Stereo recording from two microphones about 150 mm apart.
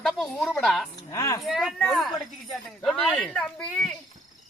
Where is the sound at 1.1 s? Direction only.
20° left (ahead or behind).